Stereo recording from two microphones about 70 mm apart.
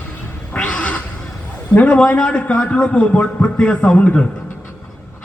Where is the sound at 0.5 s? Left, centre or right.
Centre.